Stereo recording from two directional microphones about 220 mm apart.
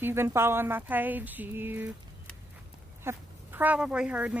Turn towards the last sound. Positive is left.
turn(degrees=-5)  # may be behind; listen again after turning